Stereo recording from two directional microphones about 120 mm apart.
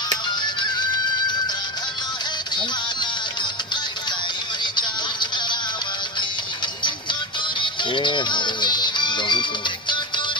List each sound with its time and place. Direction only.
0.4 s music: 40° left (ahead or behind)
4.6 s music: 40° left (ahead or behind)
6.8 s music: 40° left (ahead or behind)